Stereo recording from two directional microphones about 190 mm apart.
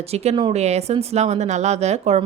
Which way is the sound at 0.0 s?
35° right (ahead or behind).